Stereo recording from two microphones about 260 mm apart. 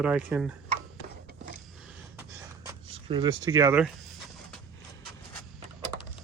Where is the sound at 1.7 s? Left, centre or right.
Centre.